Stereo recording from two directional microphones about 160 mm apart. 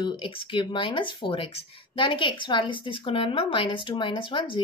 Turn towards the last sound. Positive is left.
turn(degrees=30)  # may be behind; listen again after turning